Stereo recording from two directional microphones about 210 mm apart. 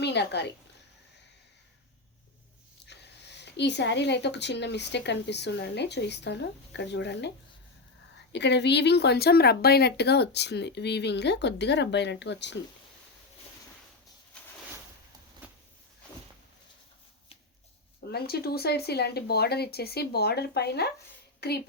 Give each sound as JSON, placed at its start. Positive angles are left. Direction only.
{"t": 0.0, "sound": "a woman's voice", "side_deg": 55}
{"t": 2.8, "sound": "speech", "side_deg": 55}
{"t": 18.1, "sound": "speech", "side_deg": 50}